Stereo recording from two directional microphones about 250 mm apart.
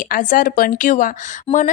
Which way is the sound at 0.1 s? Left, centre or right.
Left.